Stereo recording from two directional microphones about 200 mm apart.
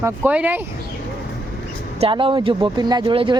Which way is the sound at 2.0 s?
25° right (ahead or behind).